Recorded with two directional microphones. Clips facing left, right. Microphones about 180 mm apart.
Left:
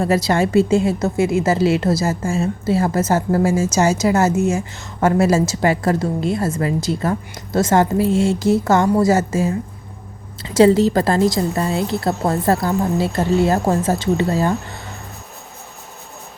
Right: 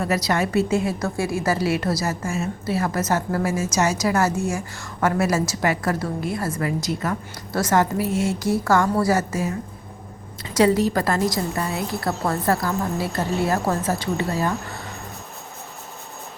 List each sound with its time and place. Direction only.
0.0 s a woman's voice: 30° left (ahead or behind)